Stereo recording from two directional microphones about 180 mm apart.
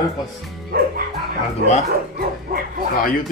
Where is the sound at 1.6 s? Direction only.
55° right (ahead or behind).